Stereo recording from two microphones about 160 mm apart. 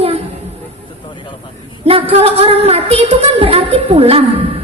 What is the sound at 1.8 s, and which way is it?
A woman's voice, 35° right (ahead or behind).